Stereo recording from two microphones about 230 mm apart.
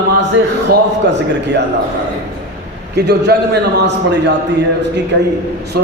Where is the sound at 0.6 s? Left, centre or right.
Right.